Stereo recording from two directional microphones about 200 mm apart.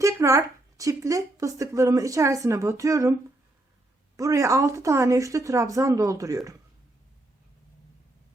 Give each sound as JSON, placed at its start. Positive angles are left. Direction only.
{"t": 0.0, "sound": "a woman's voice", "side_deg": -15}
{"t": 4.2, "sound": "a woman's voice", "side_deg": -15}